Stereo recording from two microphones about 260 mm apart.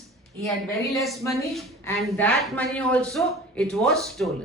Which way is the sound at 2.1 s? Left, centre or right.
Centre.